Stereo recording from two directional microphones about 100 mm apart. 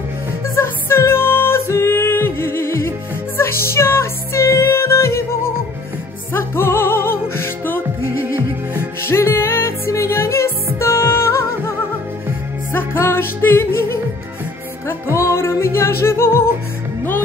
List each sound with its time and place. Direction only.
0.6 s music: 25° left (ahead or behind)
6.3 s music: 25° left (ahead or behind)
12.7 s music: 20° left (ahead or behind)
15.1 s music: 30° left (ahead or behind)